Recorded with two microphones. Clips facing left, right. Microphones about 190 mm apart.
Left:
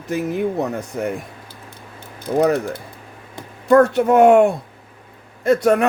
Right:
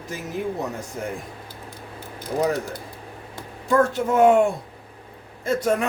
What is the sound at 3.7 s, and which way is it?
A man's voice, 65° left (ahead or behind).